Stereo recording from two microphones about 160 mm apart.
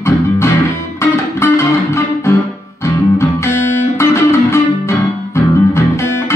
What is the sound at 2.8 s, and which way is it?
Guitar, 15° left (ahead or behind).